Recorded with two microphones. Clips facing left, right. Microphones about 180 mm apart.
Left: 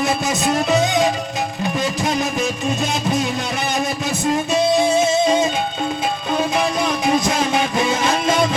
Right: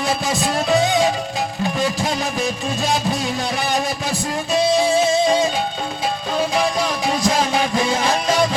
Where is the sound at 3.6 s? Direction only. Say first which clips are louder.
Even; 20° left (ahead or behind).